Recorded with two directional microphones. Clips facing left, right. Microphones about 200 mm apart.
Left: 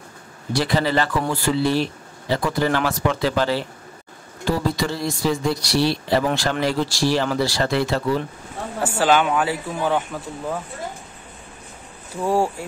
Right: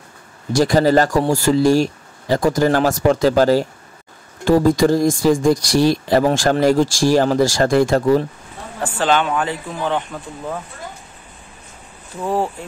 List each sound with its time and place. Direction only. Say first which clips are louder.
0.5 s speech: right 7 dB; 45° right (ahead or behind)
8.8 s speech: even; 10° left (ahead or behind)
12.2 s speech: even; 10° left (ahead or behind)